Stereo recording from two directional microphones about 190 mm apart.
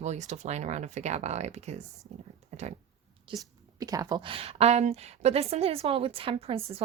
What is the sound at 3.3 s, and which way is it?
A woman's voice, 25° right (ahead or behind).